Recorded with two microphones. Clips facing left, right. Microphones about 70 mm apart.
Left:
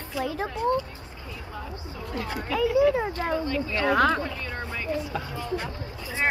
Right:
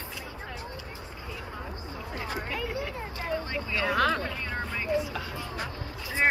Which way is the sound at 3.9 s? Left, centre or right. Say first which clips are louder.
Left 4 dB; left.